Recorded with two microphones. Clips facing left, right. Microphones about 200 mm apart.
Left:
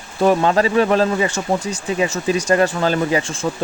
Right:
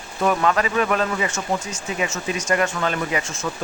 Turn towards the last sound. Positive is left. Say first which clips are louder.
# left 6 dB
turn(degrees=30)  # may be behind; listen again after turning